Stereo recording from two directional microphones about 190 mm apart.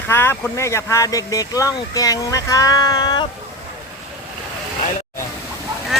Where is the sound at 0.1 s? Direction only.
10° left (ahead or behind).